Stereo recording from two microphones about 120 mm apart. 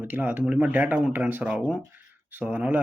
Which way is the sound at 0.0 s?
15° right (ahead or behind).